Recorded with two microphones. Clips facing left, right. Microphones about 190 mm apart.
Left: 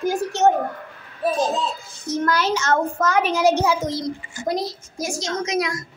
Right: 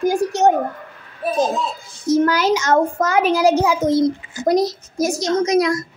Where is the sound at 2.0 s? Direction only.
10° right (ahead or behind).